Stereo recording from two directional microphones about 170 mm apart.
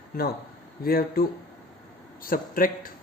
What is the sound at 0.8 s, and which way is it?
Speech, 60° left (ahead or behind).